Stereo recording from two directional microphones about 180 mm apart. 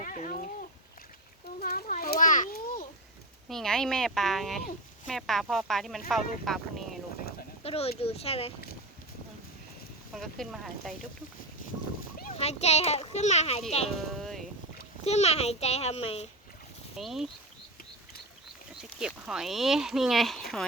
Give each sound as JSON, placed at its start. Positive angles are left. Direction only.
{"t": 0.0, "sound": "a sound", "side_deg": 50}
{"t": 1.6, "sound": "children playing", "side_deg": 55}
{"t": 3.5, "sound": "speech", "side_deg": 0}
{"t": 7.6, "sound": "a child's voice", "side_deg": 35}
{"t": 10.1, "sound": "speech", "side_deg": 0}
{"t": 12.3, "sound": "a child's voice", "side_deg": 35}
{"t": 14.1, "sound": "a sound", "side_deg": 0}
{"t": 15.0, "sound": "a child's voice", "side_deg": 35}
{"t": 17.0, "sound": "speech", "side_deg": 0}
{"t": 18.8, "sound": "speech", "side_deg": -5}